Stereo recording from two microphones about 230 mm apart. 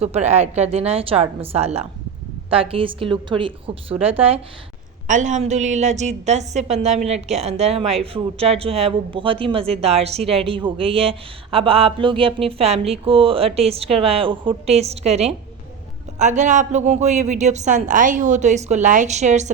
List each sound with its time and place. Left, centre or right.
0.0 s a woman's voice: right